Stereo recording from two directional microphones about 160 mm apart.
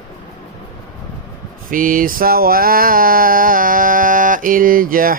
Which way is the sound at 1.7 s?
60° right (ahead or behind).